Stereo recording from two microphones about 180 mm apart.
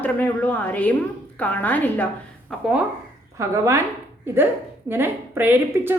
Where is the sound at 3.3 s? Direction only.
15° right (ahead or behind).